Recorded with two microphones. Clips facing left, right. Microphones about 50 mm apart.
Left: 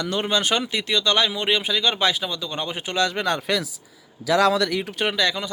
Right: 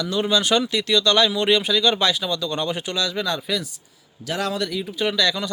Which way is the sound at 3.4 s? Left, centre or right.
Left.